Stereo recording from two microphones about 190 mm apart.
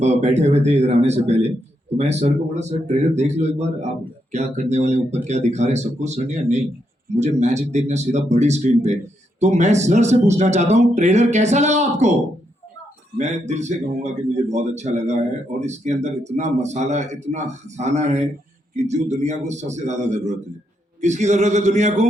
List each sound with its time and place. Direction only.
0.0 s speech: 35° right (ahead or behind)
13.1 s speech: 35° right (ahead or behind)